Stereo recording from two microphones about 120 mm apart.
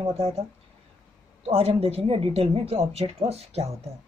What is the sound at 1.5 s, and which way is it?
A woman's voice, 55° right (ahead or behind).